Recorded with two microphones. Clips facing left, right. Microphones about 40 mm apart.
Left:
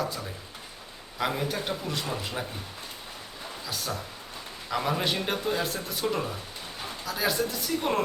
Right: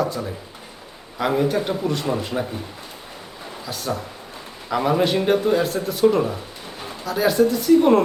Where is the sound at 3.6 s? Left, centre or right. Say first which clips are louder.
Right 7 dB; centre.